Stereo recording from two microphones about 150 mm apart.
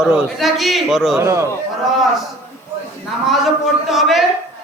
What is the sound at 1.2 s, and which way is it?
Speech, 20° right (ahead or behind).